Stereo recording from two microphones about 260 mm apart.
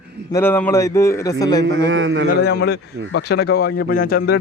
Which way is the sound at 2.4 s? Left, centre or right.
Left.